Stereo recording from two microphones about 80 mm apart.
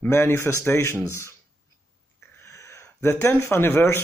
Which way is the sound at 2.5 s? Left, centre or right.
Left.